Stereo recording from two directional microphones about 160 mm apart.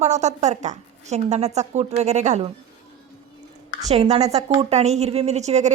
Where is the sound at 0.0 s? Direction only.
45° right (ahead or behind).